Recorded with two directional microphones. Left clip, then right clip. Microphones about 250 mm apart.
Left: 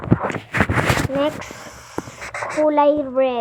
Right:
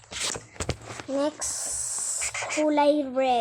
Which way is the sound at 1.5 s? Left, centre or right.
Left.